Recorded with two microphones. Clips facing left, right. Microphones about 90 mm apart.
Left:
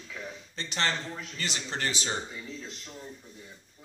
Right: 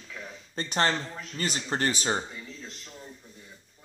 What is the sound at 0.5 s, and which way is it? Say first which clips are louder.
Speech: right 5 dB; 45° right (ahead or behind).